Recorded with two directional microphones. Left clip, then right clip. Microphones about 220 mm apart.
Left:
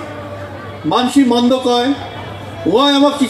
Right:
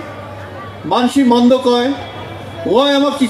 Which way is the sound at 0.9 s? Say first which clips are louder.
Even; 30° right (ahead or behind).